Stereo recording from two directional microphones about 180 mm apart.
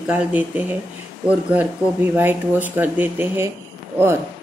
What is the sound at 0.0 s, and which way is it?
Speech, 10° right (ahead or behind).